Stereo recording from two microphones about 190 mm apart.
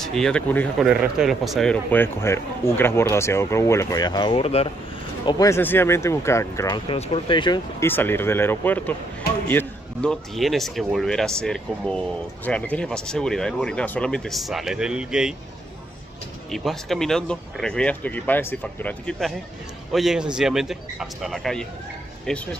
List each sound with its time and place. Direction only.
0.0 s a man's voice: centre (ahead or behind); by 4.6 s 30° left (ahead or behind)
5.2 s a man's voice: 15° left (ahead or behind)
6.9 s speech: 30° left (ahead or behind)
7.8 s a man's voice: 10° left (ahead or behind)
16.4 s speech: centre (ahead or behind)